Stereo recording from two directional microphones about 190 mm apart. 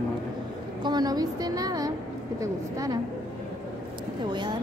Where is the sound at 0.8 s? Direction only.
20° right (ahead or behind).